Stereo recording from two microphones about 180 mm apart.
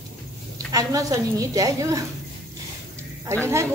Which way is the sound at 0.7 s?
20° right (ahead or behind).